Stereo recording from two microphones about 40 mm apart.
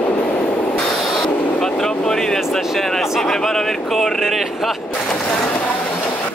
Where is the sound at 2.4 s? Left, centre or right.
Centre.